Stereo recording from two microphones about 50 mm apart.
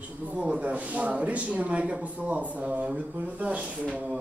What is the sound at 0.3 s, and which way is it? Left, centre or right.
A man's voice, right.